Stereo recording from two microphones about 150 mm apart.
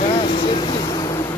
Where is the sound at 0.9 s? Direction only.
25° left (ahead or behind).